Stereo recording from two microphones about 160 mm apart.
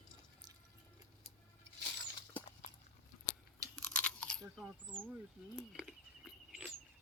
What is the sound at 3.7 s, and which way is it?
Chewing, 5° left (ahead or behind).